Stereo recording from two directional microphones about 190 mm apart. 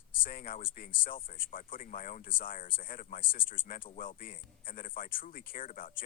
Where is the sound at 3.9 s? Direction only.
45° left (ahead or behind).